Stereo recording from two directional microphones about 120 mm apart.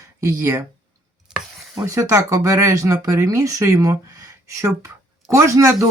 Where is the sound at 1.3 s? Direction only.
5° right (ahead or behind).